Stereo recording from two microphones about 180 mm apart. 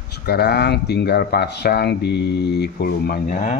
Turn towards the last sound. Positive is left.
turn(degrees=50)  # may be behind; listen again after turning